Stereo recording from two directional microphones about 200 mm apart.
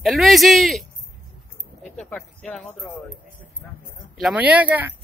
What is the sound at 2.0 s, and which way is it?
Speech, 5° left (ahead or behind).